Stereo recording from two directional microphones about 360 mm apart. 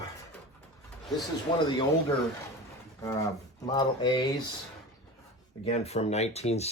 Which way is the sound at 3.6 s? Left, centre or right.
Centre.